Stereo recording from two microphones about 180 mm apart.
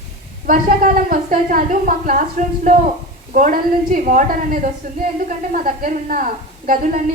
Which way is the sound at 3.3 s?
45° right (ahead or behind).